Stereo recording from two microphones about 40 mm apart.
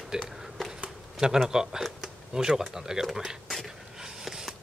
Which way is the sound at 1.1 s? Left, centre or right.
Centre.